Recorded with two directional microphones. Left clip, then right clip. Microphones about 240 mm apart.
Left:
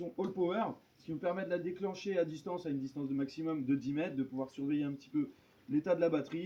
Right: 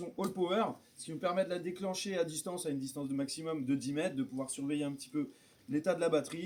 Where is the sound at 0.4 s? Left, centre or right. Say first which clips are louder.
Right 4 dB; centre.